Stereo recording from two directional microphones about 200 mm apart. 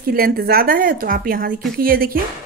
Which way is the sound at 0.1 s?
50° right (ahead or behind).